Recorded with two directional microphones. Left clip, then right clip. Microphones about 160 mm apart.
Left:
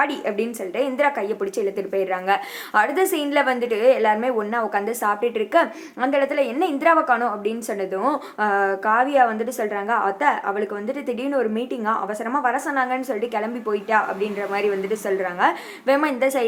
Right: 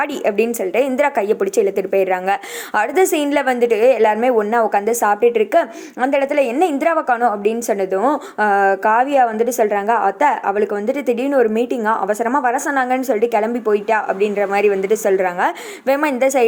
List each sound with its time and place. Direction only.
0.0 s a woman's voice: 55° right (ahead or behind)